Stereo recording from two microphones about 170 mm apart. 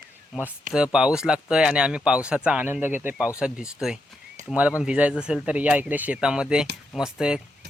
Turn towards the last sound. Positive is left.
turn(degrees=-5)  # may be behind; listen again after turning